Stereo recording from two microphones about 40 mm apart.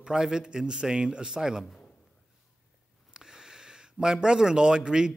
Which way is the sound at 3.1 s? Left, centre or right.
Centre.